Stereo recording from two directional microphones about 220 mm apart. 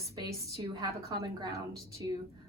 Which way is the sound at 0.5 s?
15° right (ahead or behind).